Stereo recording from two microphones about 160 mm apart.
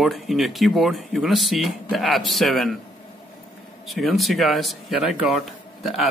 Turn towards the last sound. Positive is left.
turn(degrees=0)  # may be behind; listen again after turning